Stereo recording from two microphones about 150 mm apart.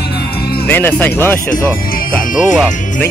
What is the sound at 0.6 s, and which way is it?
Music, 15° left (ahead or behind).